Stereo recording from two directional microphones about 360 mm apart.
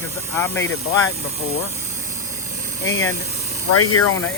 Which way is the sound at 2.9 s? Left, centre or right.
Left.